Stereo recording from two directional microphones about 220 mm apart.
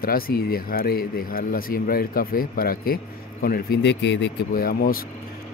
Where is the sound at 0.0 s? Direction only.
45° left (ahead or behind).